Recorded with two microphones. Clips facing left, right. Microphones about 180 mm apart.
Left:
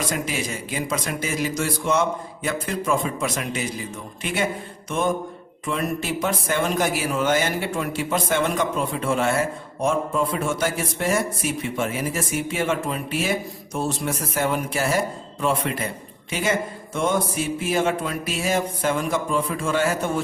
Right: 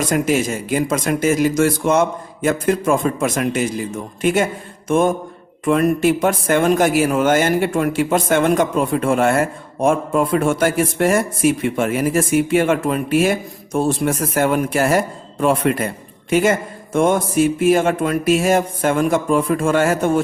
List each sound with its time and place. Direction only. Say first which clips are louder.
0.1 s speech: right 9 dB; 50° right (ahead or behind)